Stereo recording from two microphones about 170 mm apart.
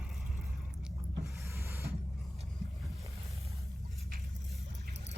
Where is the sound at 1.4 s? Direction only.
15° right (ahead or behind).